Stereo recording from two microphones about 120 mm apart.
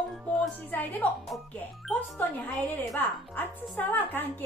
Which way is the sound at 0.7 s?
15° left (ahead or behind).